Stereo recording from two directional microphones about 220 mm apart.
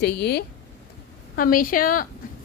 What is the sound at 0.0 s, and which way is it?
A woman's voice, 50° left (ahead or behind).